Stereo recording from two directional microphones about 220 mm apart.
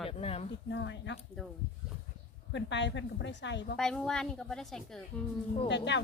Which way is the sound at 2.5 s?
55° left (ahead or behind).